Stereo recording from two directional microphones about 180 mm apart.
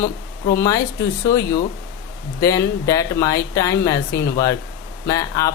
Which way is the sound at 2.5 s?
20° left (ahead or behind).